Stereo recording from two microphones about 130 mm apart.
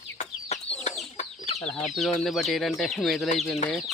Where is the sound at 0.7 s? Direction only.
55° left (ahead or behind).